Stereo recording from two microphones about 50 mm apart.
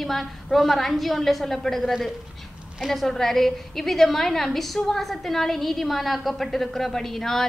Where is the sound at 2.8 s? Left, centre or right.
Centre.